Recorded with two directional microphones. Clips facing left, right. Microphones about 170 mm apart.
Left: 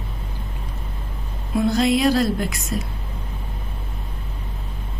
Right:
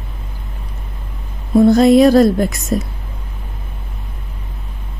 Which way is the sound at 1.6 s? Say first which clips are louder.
Right 10 dB; 45° right (ahead or behind).